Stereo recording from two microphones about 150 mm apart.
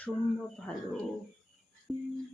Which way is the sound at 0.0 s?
10° left (ahead or behind).